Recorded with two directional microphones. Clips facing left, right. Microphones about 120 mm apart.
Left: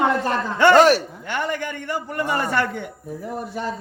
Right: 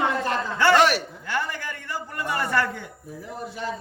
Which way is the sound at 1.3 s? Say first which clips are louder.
Left 3 dB; 65° left (ahead or behind).